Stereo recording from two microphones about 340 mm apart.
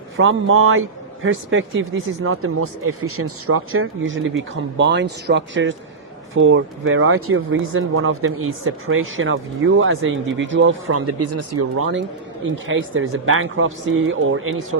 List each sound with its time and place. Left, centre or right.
0.2 s speech: right